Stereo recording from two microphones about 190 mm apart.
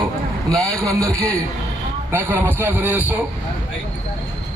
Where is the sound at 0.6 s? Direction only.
15° right (ahead or behind).